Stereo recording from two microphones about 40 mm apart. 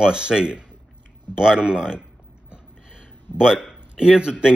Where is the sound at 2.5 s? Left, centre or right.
Right.